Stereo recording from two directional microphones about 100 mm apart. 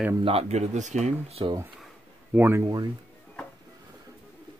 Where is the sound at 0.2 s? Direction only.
85° right.